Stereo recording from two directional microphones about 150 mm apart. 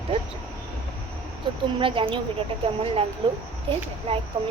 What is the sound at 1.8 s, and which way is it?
A woman's voice, 35° right (ahead or behind).